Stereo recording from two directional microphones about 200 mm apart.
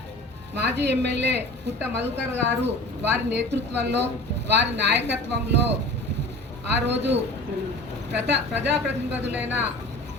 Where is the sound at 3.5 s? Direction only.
60° right (ahead or behind).